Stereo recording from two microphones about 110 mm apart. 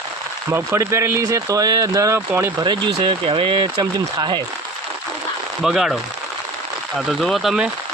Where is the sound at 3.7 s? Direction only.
35° right (ahead or behind).